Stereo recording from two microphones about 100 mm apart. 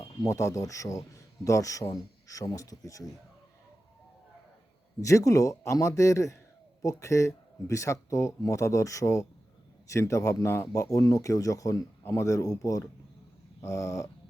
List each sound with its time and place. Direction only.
0.2 s speech: 30° left (ahead or behind)
4.9 s speech: 30° left (ahead or behind)
13.6 s dog: 30° left (ahead or behind)